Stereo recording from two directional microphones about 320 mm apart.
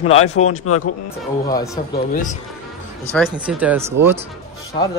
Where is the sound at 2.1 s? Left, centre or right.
Left.